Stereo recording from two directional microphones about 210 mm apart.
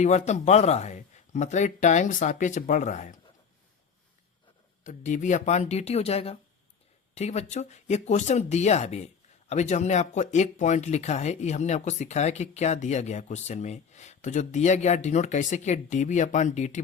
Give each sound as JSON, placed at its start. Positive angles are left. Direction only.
{"t": 0.0, "sound": "speech", "side_deg": 35}
{"t": 4.8, "sound": "speech", "side_deg": 35}